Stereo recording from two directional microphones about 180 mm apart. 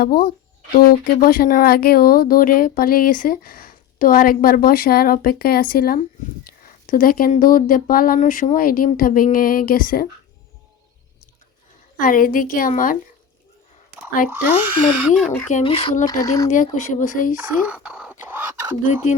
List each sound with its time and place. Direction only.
0.0 s speech: 55° left (ahead or behind)
11.9 s speech: 50° left (ahead or behind)
14.3 s speech: 10° right (ahead or behind)
15.2 s speech: 5° left (ahead or behind)
15.6 s speech: 30° left (ahead or behind)
16.2 s speech: 20° left (ahead or behind)
16.5 s speech: 45° left (ahead or behind)
17.3 s speech: 10° right (ahead or behind)
18.3 s a sound: 15° right (ahead or behind)